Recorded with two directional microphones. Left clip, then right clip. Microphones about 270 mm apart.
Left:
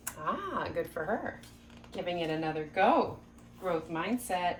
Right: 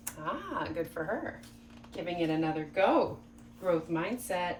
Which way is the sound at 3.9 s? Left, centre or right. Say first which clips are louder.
Right 2 dB; left.